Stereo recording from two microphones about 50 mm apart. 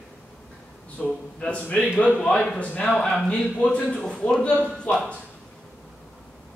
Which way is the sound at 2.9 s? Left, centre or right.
Centre.